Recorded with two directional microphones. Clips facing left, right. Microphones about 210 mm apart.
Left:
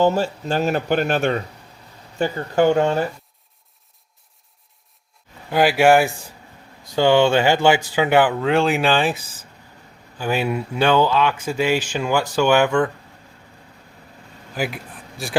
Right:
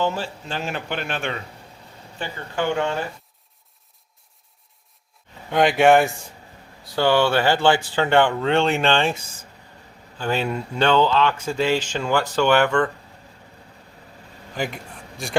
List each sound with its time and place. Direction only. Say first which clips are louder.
0.0 s speech: left 7 dB; 40° left (ahead or behind)
5.5 s speech: left 1 dB; 5° left (ahead or behind)
6.9 s speech: left 3 dB; 15° left (ahead or behind)
14.5 s speech: left 2 dB; 5° left (ahead or behind)